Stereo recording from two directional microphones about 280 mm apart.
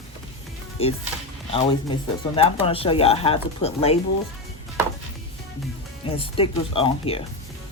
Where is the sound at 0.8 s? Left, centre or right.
Left.